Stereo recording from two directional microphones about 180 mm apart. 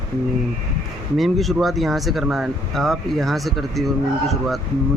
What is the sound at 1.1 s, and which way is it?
Speech, centre (ahead or behind).